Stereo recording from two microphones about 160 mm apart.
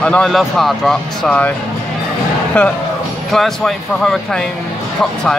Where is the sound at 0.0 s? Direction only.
5° left (ahead or behind).